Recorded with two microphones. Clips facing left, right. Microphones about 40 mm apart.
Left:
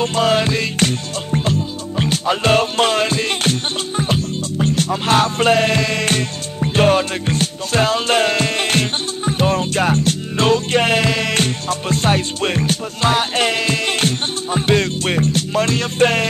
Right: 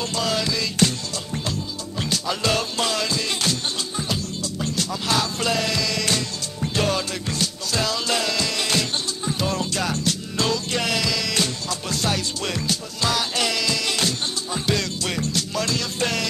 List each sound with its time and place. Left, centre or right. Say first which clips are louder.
0.0 s music: left 8 dB; left